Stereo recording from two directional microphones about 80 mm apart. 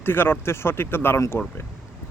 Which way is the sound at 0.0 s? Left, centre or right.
Left.